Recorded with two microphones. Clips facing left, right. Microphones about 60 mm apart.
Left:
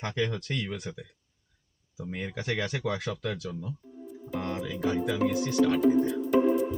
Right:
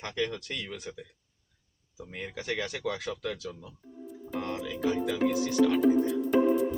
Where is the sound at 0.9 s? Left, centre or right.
Left.